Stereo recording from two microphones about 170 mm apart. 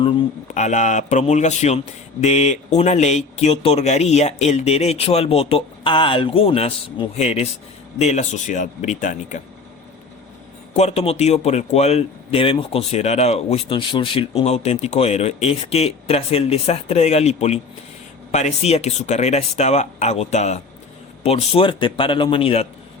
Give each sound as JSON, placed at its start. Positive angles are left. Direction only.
{"t": 0.0, "sound": "speech", "side_deg": 35}
{"t": 10.8, "sound": "speech", "side_deg": 40}